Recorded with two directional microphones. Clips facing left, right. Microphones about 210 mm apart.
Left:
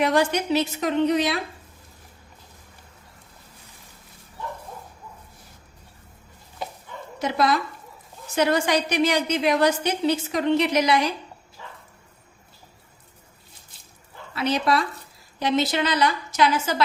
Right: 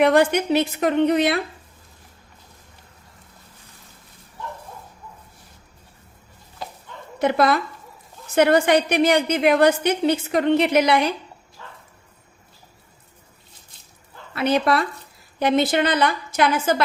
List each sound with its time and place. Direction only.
0.0 s a woman's voice: 55° right (ahead or behind)
7.2 s a woman's voice: 60° right (ahead or behind)
11.6 s dog: 10° left (ahead or behind)
14.3 s a woman's voice: 55° right (ahead or behind)